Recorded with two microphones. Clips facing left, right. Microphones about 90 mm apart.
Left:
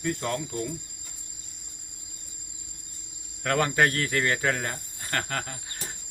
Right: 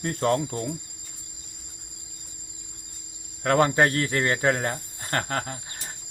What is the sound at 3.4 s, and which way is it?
Cricket, 30° right (ahead or behind).